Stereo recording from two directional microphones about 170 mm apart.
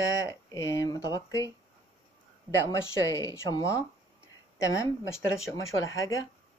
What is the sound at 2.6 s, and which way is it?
Speech, 20° left (ahead or behind).